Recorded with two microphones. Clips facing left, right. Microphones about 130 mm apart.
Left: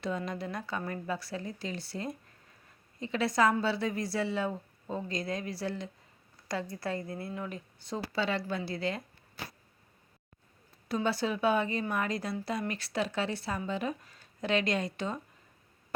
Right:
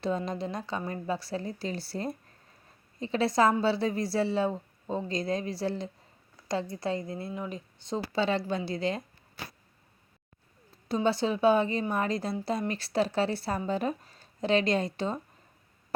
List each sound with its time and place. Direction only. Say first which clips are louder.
0.0 s a woman's voice: right 4 dB; 30° right (ahead or behind)
10.8 s a woman's voice: right 4 dB; 25° right (ahead or behind)